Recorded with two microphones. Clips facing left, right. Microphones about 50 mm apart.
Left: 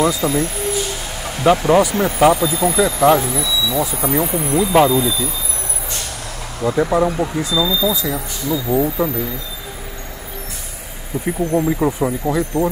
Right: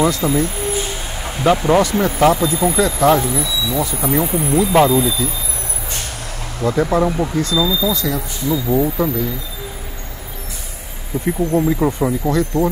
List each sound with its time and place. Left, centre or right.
0.2 s speech: centre
1.4 s speech: centre
3.3 s speech: right
3.8 s speech: centre
6.6 s speech: centre
11.2 s speech: centre